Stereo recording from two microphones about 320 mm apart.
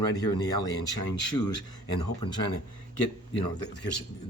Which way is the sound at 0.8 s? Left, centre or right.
Left.